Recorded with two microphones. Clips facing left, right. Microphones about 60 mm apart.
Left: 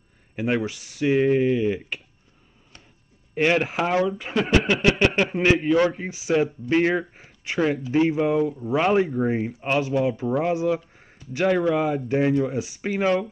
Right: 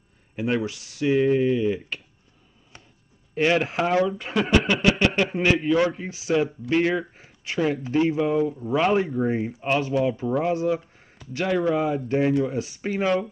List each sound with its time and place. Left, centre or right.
0.4 s speech: left
3.5 s a man's voice: centre; by 12.0 s left
12.1 s a man's voice: centre